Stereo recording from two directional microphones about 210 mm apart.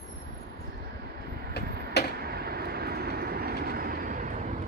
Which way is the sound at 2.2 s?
50° right (ahead or behind).